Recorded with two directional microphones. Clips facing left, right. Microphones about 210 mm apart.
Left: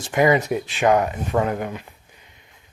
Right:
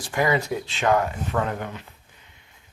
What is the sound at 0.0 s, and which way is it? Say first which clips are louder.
Speech: left 5 dB; 20° left (ahead or behind).